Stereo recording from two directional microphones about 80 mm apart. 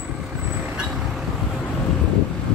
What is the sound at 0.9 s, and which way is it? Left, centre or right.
Vehicle, centre.